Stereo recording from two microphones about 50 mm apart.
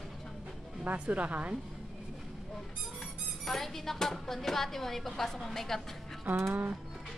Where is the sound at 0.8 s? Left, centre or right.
Right.